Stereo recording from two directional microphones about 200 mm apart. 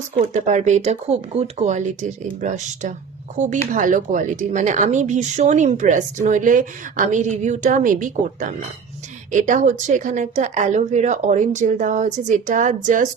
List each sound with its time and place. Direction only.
0.1 s speech: 30° right (ahead or behind)